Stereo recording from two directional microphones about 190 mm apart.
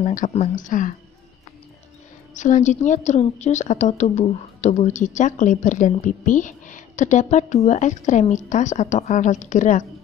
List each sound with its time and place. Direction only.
0.0 s speech: 40° left (ahead or behind)
2.3 s a woman's voice: 40° left (ahead or behind)